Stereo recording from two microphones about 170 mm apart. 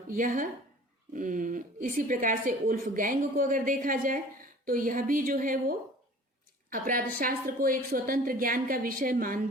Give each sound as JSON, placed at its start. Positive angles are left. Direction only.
{"t": 0.1, "sound": "a woman's voice", "side_deg": -50}